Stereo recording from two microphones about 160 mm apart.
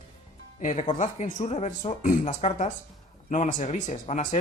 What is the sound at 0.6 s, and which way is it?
Speech, 45° left (ahead or behind).